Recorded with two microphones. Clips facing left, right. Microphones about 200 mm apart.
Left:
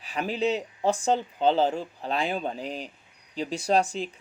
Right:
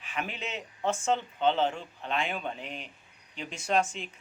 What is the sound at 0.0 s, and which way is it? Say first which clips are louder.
Speech: left 9 dB; 35° left (ahead or behind).